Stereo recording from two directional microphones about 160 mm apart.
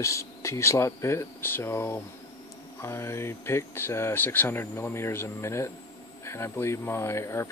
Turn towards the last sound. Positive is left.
turn(degrees=15)  # may be behind; listen again after turning